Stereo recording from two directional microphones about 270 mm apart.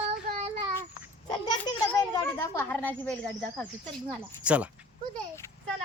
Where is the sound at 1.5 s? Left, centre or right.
Centre.